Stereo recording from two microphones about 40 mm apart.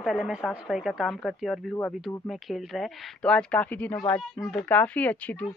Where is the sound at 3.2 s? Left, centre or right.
Left.